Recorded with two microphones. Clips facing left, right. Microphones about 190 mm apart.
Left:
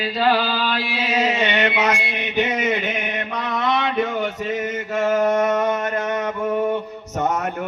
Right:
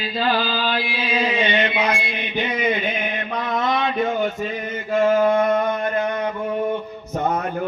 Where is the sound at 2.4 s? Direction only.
75° left (ahead or behind).